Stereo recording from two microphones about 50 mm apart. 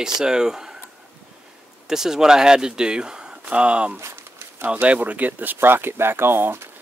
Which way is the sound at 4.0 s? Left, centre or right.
Right.